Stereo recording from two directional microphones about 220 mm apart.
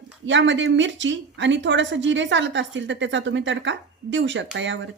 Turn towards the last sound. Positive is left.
turn(degrees=-55)  # may be behind; listen again after turning